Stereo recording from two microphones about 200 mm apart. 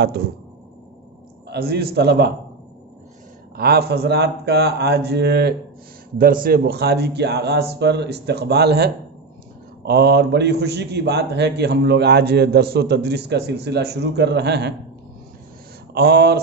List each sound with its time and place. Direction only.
1.5 s a man's voice: 50° right (ahead or behind)
3.5 s a man's voice: 50° right (ahead or behind)
15.9 s speech: 55° right (ahead or behind)